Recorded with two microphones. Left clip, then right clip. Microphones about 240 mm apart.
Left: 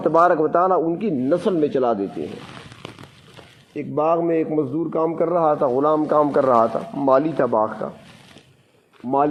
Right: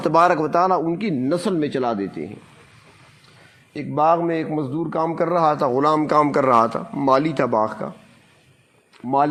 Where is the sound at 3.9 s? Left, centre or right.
Right.